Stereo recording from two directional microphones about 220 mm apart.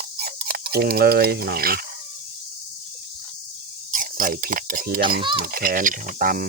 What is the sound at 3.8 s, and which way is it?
Speech, 40° right (ahead or behind).